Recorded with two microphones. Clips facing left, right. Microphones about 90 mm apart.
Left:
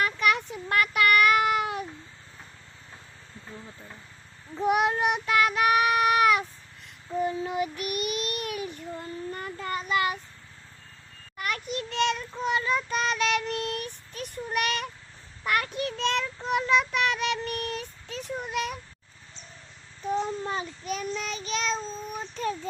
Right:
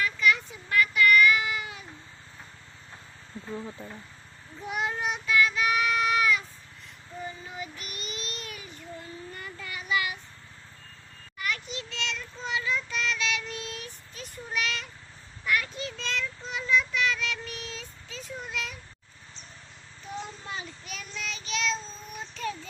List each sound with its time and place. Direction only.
0.0 s child singing: 60° left (ahead or behind)
4.5 s child singing: 65° left (ahead or behind)
9.3 s child singing: 45° left (ahead or behind)
11.3 s child singing: 50° left (ahead or behind)
20.4 s child singing: 40° left (ahead or behind)